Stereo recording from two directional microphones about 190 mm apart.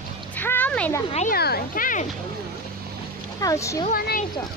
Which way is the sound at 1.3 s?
55° left (ahead or behind).